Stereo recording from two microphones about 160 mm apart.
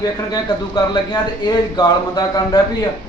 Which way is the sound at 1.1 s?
25° left (ahead or behind).